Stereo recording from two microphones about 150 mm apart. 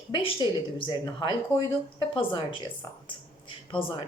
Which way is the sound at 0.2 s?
35° left (ahead or behind).